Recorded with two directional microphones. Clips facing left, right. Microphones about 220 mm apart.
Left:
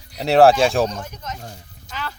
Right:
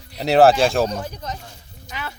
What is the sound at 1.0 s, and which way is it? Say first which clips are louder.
Speech: right 3 dB; 35° right (ahead or behind).